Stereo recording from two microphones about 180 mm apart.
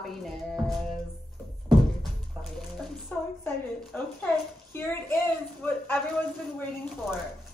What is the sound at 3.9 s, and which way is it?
Speech, 5° left (ahead or behind).